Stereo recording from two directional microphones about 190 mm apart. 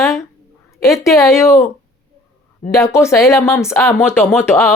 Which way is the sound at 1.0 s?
15° left (ahead or behind).